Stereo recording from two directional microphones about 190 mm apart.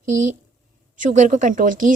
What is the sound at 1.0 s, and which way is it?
Speech, 40° right (ahead or behind).